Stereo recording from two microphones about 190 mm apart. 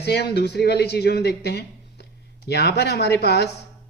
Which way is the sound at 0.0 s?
60° left (ahead or behind).